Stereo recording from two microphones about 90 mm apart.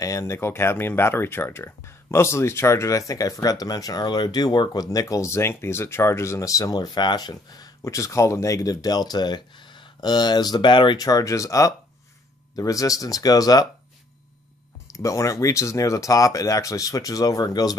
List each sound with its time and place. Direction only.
0.0 s speech: 35° left (ahead or behind); by 11.0 s 65° left (ahead or behind)
11.0 s speech: 40° left (ahead or behind)
14.9 s speech: 35° left (ahead or behind)